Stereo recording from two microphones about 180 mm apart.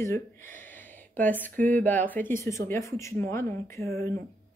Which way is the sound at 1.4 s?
10° left (ahead or behind).